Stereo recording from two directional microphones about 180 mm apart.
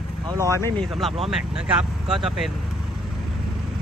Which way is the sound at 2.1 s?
Centre (ahead or behind).